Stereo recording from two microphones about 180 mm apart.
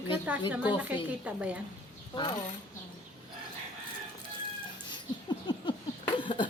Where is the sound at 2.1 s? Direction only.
25° left (ahead or behind).